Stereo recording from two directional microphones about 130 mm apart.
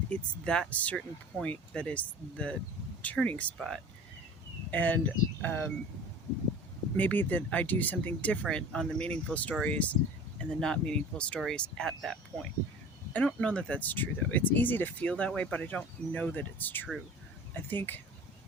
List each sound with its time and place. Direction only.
0.1 s speech: 5° left (ahead or behind)
6.9 s speech: 15° left (ahead or behind)